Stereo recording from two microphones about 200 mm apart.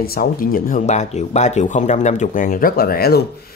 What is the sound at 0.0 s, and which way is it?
Speech, 50° left (ahead or behind).